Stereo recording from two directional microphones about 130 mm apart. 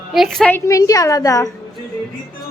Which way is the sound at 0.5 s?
25° left (ahead or behind).